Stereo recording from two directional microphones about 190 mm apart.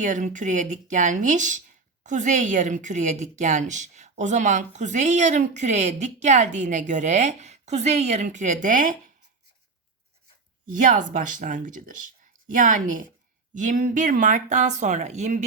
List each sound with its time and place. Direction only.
0.0 s a woman's voice: 40° right (ahead or behind)
10.7 s a woman's voice: 45° right (ahead or behind)